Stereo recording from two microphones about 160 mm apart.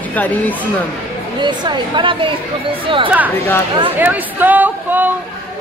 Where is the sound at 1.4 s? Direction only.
30° right (ahead or behind).